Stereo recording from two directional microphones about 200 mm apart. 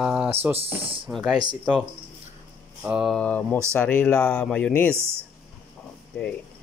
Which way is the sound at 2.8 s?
5° right (ahead or behind).